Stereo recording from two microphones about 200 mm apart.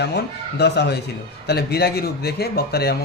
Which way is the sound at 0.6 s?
55° left (ahead or behind).